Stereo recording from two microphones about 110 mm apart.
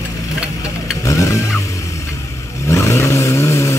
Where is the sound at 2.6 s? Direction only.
25° left (ahead or behind).